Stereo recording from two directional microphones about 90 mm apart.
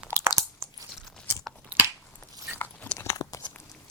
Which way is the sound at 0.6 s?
40° right (ahead or behind).